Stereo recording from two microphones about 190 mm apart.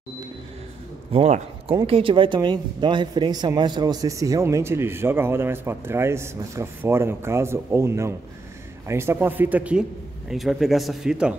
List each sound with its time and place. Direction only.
1.1 s a man's voice: 30° right (ahead or behind); by 11.3 s 5° right (ahead or behind)